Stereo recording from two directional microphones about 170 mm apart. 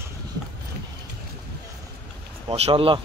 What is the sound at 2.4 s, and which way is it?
Speech, 35° right (ahead or behind).